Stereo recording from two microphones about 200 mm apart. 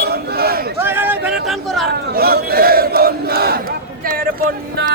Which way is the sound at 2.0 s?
50° right (ahead or behind).